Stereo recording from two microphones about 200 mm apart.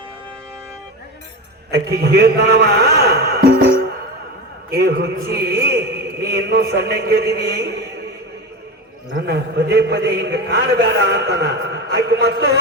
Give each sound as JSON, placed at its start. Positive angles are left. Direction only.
{"t": 1.7, "sound": "a man's voice", "side_deg": -55}
{"t": 9.1, "sound": "a man's voice", "side_deg": -55}